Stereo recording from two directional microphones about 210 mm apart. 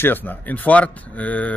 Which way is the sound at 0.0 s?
10° left (ahead or behind).